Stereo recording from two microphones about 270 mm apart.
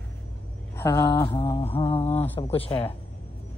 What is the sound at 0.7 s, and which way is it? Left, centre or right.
Speech, centre.